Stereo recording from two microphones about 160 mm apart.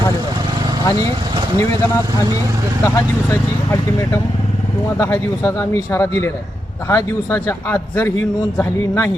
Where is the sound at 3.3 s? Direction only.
15° left (ahead or behind).